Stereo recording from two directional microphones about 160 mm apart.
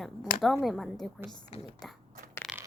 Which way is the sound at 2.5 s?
Centre (ahead or behind).